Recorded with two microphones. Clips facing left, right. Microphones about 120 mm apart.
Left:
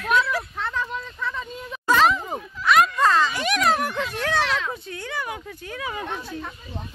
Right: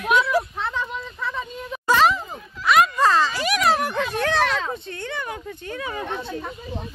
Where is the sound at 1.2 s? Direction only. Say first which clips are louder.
Right 3 dB; 5° right (ahead or behind).